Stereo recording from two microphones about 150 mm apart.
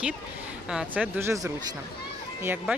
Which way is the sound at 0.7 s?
10° right (ahead or behind).